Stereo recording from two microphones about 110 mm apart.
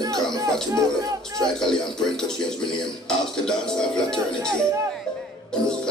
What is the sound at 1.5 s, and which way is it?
Speech, 5° left (ahead or behind).